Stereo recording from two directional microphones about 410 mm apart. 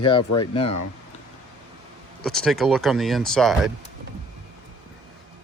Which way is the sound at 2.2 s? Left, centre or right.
Centre.